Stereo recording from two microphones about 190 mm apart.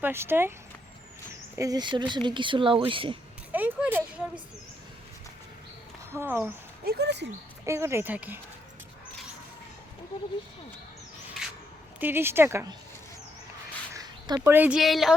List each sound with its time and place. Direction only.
0.0 s speech: 10° right (ahead or behind)
1.5 s speech: 20° right (ahead or behind)
3.5 s a sound: 10° right (ahead or behind)
6.1 s speech: 15° right (ahead or behind)
6.8 s speech: 60° right (ahead or behind)
7.6 s speech: 15° right (ahead or behind)
11.9 s speech: 10° right (ahead or behind)
13.9 s quack: 20° right (ahead or behind)
14.4 s speech: 10° right (ahead or behind)